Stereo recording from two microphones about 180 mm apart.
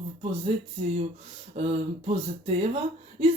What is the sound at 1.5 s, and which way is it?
Speech, 35° right (ahead or behind).